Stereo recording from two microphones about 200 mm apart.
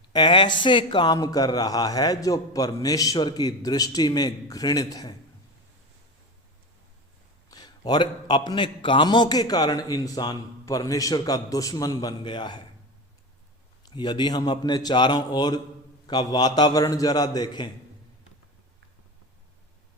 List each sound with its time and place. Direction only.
0.1 s speech: 25° left (ahead or behind)
7.5 s speech: 20° left (ahead or behind)
13.8 s speech: 20° left (ahead or behind)